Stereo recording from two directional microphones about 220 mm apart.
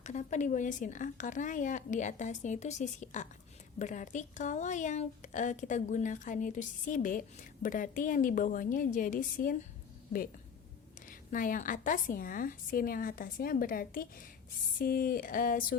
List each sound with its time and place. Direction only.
0.0 s a woman's voice: 30° left (ahead or behind)
11.0 s a woman's voice: 35° left (ahead or behind)